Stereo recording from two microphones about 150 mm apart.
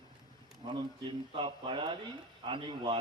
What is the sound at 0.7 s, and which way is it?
Speech, 35° right (ahead or behind).